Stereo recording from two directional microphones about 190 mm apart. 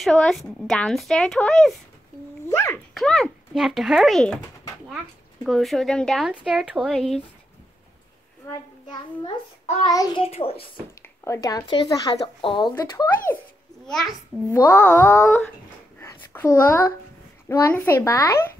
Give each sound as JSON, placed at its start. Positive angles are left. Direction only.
{"t": 0.0, "sound": "speech", "side_deg": 0}
{"t": 2.5, "sound": "a child's voice", "side_deg": 15}
{"t": 2.9, "sound": "speech", "side_deg": 0}
{"t": 9.8, "sound": "speech", "side_deg": 20}
{"t": 11.0, "sound": "speech", "side_deg": 15}
{"t": 13.8, "sound": "a child's voice", "side_deg": 0}
{"t": 14.5, "sound": "a child's voice", "side_deg": 15}
{"t": 16.0, "sound": "a sound", "side_deg": 15}
{"t": 17.5, "sound": "a child's voice", "side_deg": 15}